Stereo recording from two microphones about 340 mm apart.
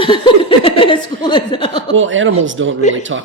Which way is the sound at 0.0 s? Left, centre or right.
Centre.